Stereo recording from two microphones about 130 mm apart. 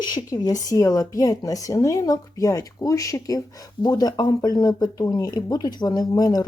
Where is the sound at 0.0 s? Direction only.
30° left (ahead or behind).